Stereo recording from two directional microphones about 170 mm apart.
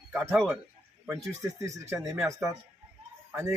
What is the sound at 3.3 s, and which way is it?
Speech, 20° right (ahead or behind).